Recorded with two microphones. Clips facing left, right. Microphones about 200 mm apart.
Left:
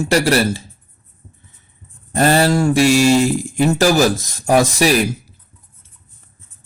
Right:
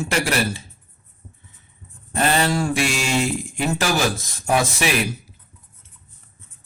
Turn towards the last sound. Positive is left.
turn(degrees=40)  # may be behind; listen again after turning